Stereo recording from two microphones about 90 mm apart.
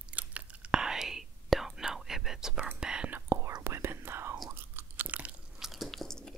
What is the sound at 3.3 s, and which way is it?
Whispering, 30° right (ahead or behind).